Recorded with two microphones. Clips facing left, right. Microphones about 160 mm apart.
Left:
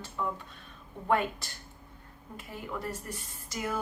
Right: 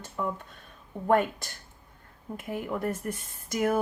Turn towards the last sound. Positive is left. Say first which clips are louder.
# right 9 dB
turn(degrees=-55)  # may be behind; listen again after turning